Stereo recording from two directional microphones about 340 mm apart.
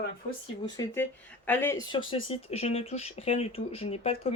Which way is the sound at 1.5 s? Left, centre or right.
Centre.